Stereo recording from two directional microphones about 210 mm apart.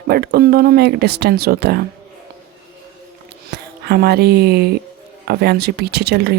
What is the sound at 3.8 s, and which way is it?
Speech, 50° right (ahead or behind).